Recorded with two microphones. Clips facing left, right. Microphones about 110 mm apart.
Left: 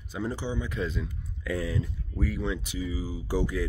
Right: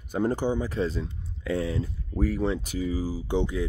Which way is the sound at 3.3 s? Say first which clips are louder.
Right 1 dB; 25° right (ahead or behind).